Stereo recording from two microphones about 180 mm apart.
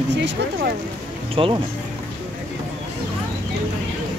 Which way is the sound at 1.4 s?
30° right (ahead or behind).